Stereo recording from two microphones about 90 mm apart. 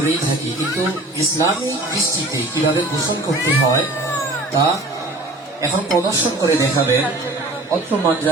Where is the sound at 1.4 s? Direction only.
40° right (ahead or behind).